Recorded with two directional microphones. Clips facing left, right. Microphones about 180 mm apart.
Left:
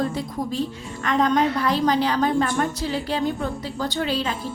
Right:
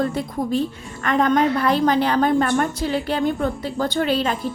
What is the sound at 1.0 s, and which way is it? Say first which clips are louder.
Speech: right 2 dB; 55° right (ahead or behind).